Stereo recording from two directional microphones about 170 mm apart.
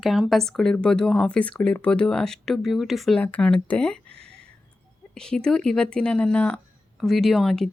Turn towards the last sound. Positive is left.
turn(degrees=0)  # may be behind; listen again after turning